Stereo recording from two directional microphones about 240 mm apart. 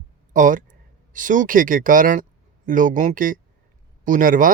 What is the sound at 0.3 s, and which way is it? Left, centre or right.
Speech, right.